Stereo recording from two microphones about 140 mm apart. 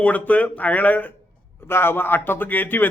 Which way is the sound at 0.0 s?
10° left (ahead or behind).